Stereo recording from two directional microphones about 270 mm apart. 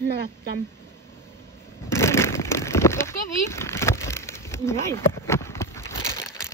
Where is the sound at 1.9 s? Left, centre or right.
Centre.